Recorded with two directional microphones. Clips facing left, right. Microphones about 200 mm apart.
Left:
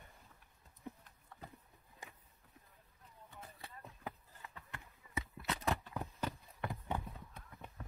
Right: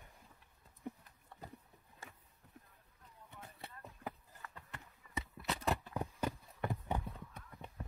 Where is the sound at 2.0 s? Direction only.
15° left (ahead or behind).